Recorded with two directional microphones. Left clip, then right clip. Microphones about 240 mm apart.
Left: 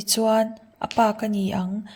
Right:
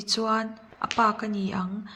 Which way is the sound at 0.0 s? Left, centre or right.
Left.